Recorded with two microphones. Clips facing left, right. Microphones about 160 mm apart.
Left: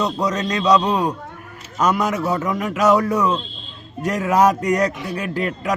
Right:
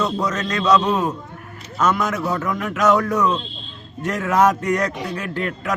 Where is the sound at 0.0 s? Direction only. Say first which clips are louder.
Left 1 dB; 15° left (ahead or behind).